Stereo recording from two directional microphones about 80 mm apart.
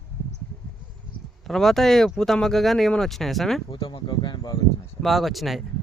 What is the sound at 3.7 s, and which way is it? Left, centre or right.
Speech, left.